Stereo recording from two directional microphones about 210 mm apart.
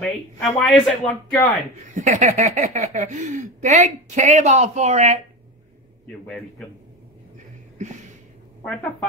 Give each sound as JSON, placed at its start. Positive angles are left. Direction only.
{"t": 0.0, "sound": "speech", "side_deg": 0}
{"t": 2.0, "sound": "speech", "side_deg": -35}